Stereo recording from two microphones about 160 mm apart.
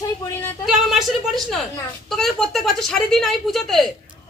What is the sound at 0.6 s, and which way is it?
A woman's voice, centre (ahead or behind).